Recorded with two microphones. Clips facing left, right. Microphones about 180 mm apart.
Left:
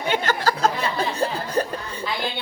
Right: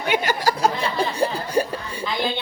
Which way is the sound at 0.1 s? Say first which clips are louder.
Right 1 dB; 10° right (ahead or behind).